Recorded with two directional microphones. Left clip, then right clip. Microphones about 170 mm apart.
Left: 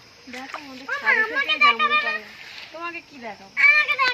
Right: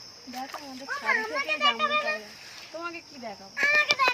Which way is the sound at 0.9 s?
35° right (ahead or behind).